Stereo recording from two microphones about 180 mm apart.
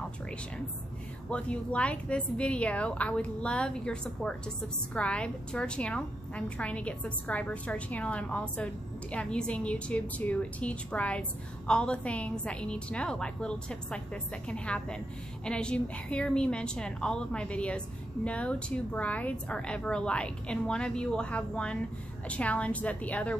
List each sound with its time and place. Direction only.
1.3 s a woman's voice: 5° left (ahead or behind)